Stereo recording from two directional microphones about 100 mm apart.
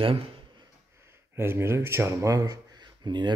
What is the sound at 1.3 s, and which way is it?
Speech, 25° right (ahead or behind).